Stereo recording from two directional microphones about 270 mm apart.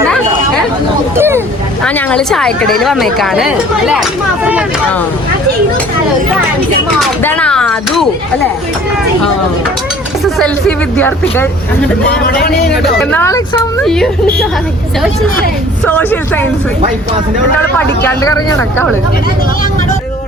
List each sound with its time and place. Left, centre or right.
1.1 s boat: centre
1.8 s a woman's voice: centre
7.0 s speech: centre
10.2 s speech: centre
12.2 s a man's voice: left
12.7 s speech: centre
16.0 s speech: centre
18.0 s speech: centre